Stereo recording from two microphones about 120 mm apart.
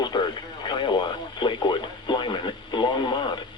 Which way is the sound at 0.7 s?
40° left (ahead or behind).